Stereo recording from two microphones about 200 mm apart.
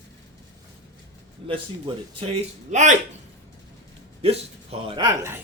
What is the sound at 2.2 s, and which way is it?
Speech, 35° right (ahead or behind).